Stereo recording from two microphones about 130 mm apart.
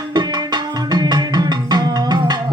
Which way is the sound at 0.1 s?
35° right (ahead or behind).